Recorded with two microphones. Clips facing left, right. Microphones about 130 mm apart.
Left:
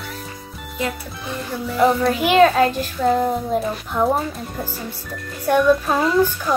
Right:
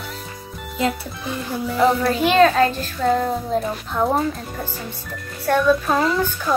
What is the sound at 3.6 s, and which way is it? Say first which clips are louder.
A child's voice: left 1 dB; centre (ahead or behind).